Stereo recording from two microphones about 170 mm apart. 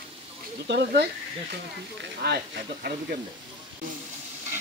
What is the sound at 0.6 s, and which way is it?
Speech, 75° right (ahead or behind).